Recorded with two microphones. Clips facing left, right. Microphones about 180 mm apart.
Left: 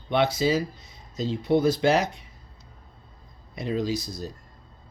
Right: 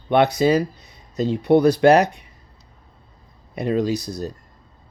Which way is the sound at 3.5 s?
65° right (ahead or behind).